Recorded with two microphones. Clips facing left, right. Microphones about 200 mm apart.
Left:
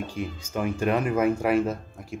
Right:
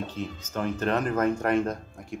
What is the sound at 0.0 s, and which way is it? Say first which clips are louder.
Speech: left 2 dB; 10° left (ahead or behind).